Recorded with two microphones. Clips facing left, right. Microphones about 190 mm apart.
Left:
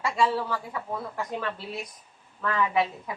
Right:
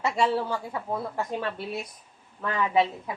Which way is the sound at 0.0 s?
25° right (ahead or behind).